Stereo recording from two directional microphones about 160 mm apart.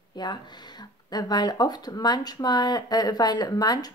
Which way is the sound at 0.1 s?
25° left (ahead or behind).